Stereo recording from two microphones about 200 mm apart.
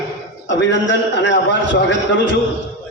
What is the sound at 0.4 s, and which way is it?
A man's voice, 65° left (ahead or behind).